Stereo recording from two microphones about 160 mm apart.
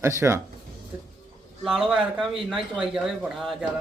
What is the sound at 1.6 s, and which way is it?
Speech, 5° right (ahead or behind).